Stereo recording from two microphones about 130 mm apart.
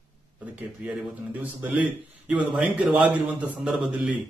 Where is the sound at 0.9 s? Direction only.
10° right (ahead or behind).